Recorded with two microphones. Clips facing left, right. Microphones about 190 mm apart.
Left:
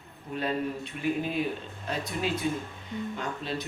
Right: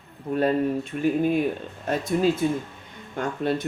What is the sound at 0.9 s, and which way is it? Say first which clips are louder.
A woman's voice: right 7 dB; 50° right (ahead or behind).